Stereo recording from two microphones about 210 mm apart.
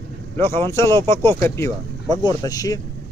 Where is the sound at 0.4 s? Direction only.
10° left (ahead or behind).